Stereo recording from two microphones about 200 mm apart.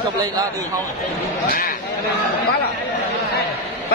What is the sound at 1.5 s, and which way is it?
Speech, 45° left (ahead or behind).